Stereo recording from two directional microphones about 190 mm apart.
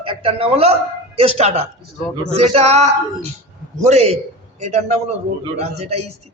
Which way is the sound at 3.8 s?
35° right (ahead or behind).